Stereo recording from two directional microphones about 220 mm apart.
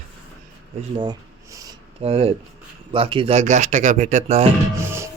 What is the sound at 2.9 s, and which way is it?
Speech, 25° right (ahead or behind).